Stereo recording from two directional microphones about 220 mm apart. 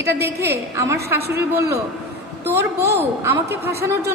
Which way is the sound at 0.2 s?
10° right (ahead or behind).